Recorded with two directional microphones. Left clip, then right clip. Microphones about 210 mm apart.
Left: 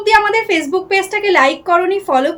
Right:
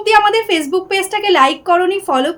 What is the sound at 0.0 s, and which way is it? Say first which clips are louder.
A woman's voice: right 1 dB; 20° right (ahead or behind).